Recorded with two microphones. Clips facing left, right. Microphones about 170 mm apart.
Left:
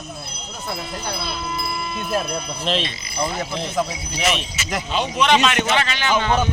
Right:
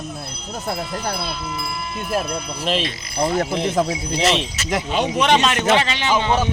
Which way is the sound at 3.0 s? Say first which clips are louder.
Right 5 dB; 75° right (ahead or behind).